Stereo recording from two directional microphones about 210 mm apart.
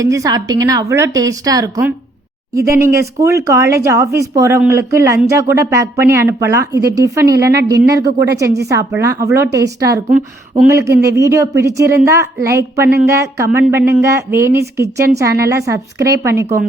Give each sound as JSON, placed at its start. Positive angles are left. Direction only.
{"t": 0.0, "sound": "speech", "side_deg": -15}